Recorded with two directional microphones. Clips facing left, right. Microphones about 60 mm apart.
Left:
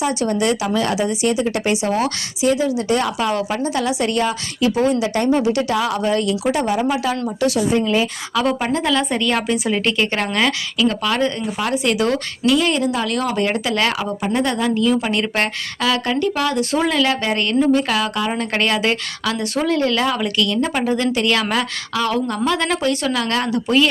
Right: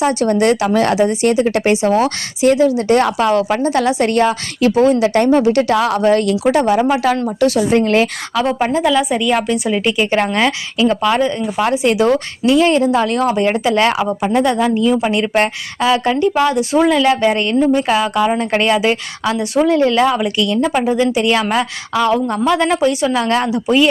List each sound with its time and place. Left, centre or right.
0.0 s speech: right
7.8 s a woman's voice: right
8.4 s a woman's voice: right
8.7 s a woman's voice: centre
10.0 s a woman's voice: centre
14.3 s a woman's voice: centre